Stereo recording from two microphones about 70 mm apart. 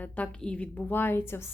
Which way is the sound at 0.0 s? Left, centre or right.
Centre.